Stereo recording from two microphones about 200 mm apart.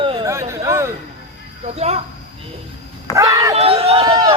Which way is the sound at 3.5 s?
30° right (ahead or behind).